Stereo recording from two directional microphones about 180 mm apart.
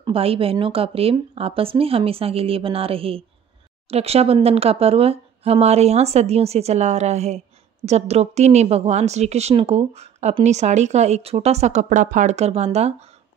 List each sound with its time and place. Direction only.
0.0 s speech: 30° right (ahead or behind)